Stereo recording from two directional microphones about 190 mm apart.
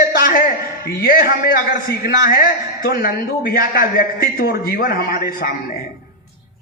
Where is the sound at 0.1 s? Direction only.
50° left (ahead or behind).